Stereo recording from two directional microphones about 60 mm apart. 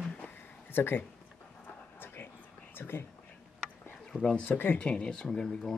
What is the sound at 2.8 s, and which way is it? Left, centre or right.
Whispering, left.